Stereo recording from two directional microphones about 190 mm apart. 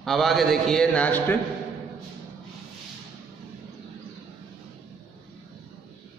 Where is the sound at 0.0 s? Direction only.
Centre (ahead or behind).